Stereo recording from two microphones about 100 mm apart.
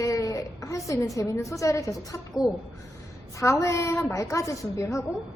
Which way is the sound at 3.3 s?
30° left (ahead or behind).